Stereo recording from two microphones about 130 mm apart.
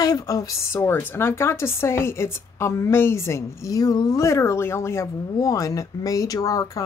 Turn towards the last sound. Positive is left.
turn(degrees=30)  # may be behind; listen again after turning